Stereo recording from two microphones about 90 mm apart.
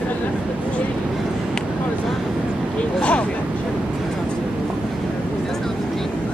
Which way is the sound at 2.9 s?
15° left (ahead or behind).